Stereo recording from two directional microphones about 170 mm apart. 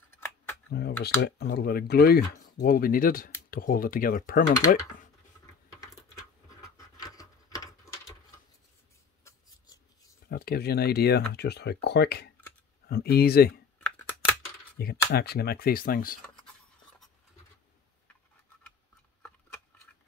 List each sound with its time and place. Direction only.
0.1 s camera: 15° left (ahead or behind)
0.7 s speech: 70° left (ahead or behind)
7.0 s patter: 20° left (ahead or behind)
10.2 s speech: 65° left (ahead or behind)
13.7 s computer keyboard: 10° left (ahead or behind)
14.8 s speech: 65° left (ahead or behind)